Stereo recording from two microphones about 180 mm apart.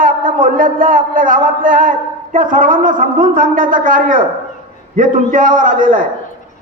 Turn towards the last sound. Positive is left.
turn(degrees=-50)  # may be behind; listen again after turning